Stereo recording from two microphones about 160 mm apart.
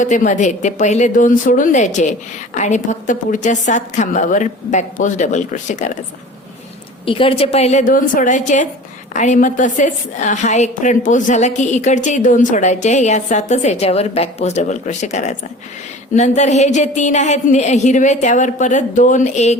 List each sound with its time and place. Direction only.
0.0 s a woman's voice: 50° left (ahead or behind)
7.0 s a woman's voice: 35° left (ahead or behind)